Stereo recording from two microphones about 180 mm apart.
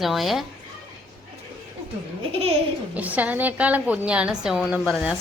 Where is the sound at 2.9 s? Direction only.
10° right (ahead or behind).